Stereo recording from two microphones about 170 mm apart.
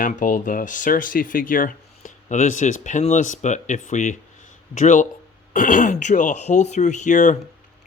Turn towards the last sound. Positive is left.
turn(degrees=45)  # may be behind; listen again after turning